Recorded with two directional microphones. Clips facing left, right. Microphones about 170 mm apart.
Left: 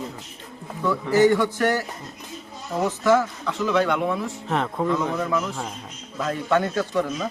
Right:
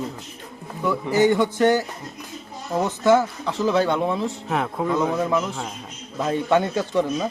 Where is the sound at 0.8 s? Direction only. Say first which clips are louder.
Left 1 dB; 20° right (ahead or behind).